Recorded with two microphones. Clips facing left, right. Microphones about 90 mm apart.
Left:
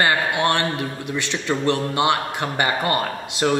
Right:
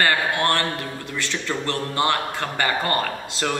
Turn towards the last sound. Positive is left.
turn(degrees=15)  # may be behind; listen again after turning